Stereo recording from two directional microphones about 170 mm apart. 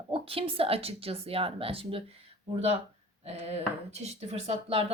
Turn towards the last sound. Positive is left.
turn(degrees=-35)  # may be behind; listen again after turning